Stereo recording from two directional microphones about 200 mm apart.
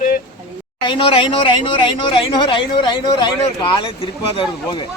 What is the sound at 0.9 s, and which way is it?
Speech, 25° left (ahead or behind).